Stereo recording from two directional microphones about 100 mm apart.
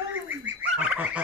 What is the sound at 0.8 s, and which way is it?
Fowl, 15° right (ahead or behind).